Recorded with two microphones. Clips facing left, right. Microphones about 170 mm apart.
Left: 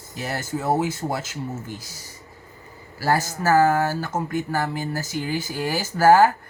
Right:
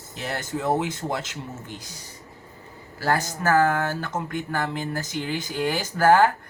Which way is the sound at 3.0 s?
5° left (ahead or behind).